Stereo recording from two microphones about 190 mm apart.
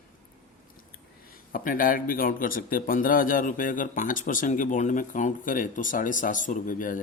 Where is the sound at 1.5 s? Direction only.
45° left (ahead or behind).